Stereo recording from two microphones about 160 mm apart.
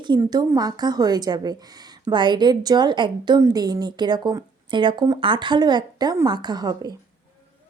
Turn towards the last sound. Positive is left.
turn(degrees=-25)  # may be behind; listen again after turning